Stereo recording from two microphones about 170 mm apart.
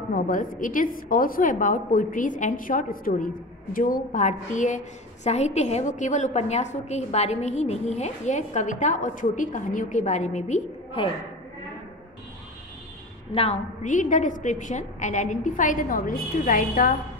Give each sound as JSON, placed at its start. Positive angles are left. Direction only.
{"t": 0.1, "sound": "a woman's voice", "side_deg": 50}
{"t": 13.3, "sound": "a woman's voice", "side_deg": 40}